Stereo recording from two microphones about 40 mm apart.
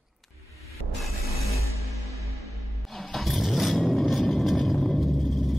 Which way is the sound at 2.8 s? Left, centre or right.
Centre.